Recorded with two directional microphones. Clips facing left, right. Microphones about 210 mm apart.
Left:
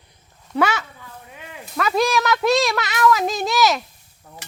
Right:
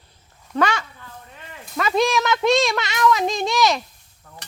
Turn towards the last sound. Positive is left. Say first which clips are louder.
# left 2 dB
turn(degrees=20)  # may be behind; listen again after turning